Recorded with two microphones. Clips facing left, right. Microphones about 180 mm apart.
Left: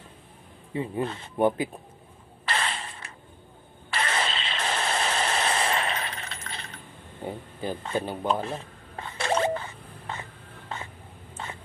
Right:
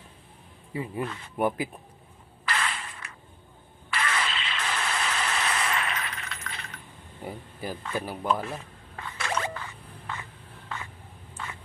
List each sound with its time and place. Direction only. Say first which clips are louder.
0.7 s speech: left 3 dB; 30° left (ahead or behind)
2.4 s mechanisms: left 1 dB; 30° left (ahead or behind)
3.9 s vehicle: left 1 dB; 30° left (ahead or behind)
11.4 s biting: left 1 dB; 25° left (ahead or behind)